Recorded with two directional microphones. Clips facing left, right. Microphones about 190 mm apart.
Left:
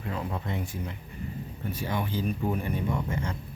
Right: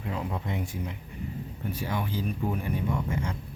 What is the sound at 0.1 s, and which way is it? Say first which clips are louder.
Speech: even; 15° right (ahead or behind).